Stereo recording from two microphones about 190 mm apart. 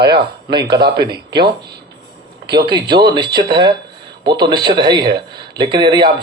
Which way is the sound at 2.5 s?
25° right (ahead or behind).